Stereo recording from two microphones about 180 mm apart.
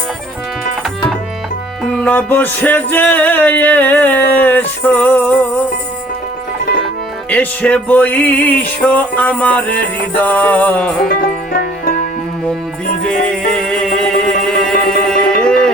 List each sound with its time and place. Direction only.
1.8 s music: 10° left (ahead or behind)
7.3 s music: 10° left (ahead or behind)
11.1 s music: 55° left (ahead or behind)
13.1 s music: 5° left (ahead or behind)